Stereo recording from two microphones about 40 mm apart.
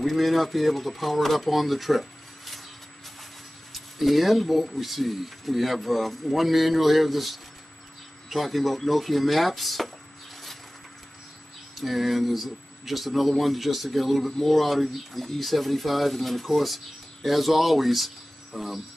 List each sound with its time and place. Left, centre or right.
0.0 s speech: centre
3.7 s speech: centre
11.7 s speech: centre